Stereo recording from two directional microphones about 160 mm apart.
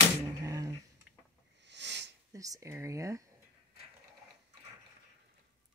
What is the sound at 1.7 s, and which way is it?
Sniff, 90° right.